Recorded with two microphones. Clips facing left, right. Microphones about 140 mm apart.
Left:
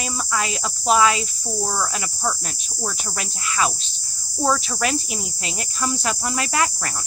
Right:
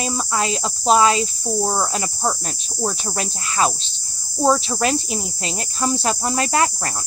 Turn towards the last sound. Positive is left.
turn(degrees=-35)  # may be behind; listen again after turning